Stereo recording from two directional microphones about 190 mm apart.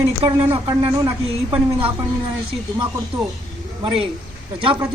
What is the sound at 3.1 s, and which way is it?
Speech, 30° right (ahead or behind).